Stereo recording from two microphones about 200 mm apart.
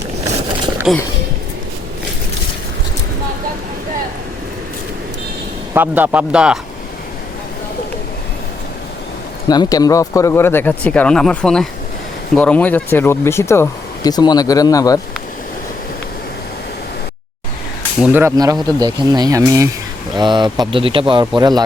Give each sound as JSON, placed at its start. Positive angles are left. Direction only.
{"t": 0.9, "sound": "speech", "side_deg": 0}
{"t": 5.7, "sound": "speech", "side_deg": -10}
{"t": 9.5, "sound": "speech", "side_deg": 20}
{"t": 18.0, "sound": "speech", "side_deg": -10}